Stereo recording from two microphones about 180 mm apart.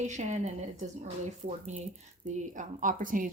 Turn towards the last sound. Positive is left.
turn(degrees=-50)  # may be behind; listen again after turning